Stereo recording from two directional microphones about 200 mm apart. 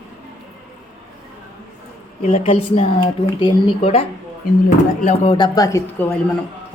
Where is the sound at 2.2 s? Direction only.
30° left (ahead or behind).